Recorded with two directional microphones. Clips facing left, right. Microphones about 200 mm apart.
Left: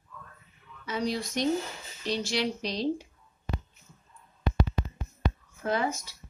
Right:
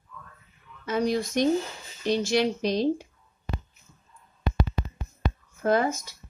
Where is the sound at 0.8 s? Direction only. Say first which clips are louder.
Right 5 dB; 50° right (ahead or behind).